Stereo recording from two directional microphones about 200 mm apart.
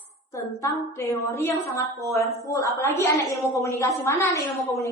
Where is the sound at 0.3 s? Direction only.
15° left (ahead or behind).